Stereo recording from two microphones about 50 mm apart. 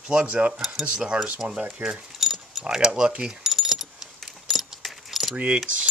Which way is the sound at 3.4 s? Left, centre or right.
Centre.